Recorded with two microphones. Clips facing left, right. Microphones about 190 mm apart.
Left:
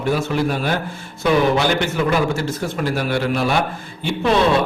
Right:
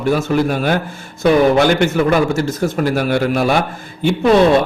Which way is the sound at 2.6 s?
45° right (ahead or behind).